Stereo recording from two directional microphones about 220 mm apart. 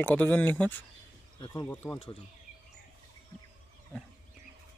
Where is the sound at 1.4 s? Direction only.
20° left (ahead or behind).